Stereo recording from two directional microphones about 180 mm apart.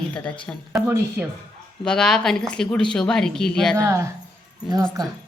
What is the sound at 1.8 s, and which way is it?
A woman's voice, 5° left (ahead or behind).